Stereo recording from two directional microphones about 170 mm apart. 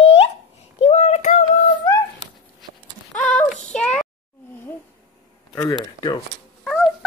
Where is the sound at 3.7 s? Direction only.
5° left (ahead or behind).